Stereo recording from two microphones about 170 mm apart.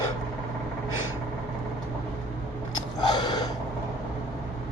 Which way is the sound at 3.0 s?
25° left (ahead or behind).